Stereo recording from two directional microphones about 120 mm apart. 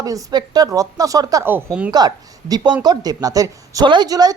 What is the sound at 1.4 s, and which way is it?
Speech, 15° right (ahead or behind).